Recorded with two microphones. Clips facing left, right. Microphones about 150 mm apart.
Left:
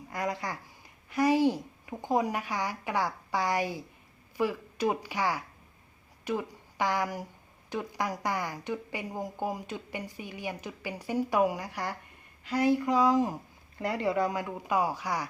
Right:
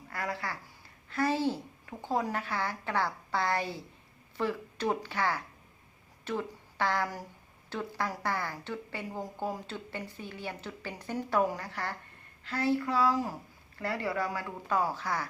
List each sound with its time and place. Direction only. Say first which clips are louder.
0.1 s speech: left 3 dB; 15° left (ahead or behind)